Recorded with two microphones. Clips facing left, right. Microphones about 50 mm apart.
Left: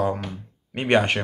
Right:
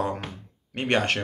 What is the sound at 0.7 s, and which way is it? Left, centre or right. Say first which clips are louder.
Speech: left 4 dB; centre.